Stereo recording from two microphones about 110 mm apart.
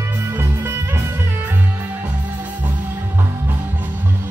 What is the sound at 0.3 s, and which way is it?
Music, 20° right (ahead or behind).